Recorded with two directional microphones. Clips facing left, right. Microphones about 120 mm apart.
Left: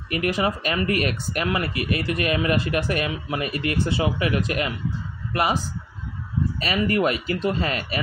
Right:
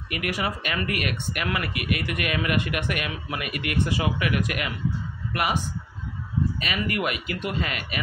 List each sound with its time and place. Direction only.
0.1 s a man's voice: 30° left (ahead or behind)
6.6 s speech: 35° left (ahead or behind)